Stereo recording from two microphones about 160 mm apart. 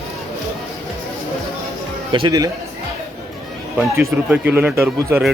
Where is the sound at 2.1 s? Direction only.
25° right (ahead or behind).